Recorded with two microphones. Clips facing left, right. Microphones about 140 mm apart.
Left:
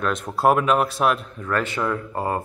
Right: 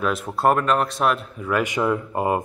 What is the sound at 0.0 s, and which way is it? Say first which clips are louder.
Speech: even; 5° right (ahead or behind).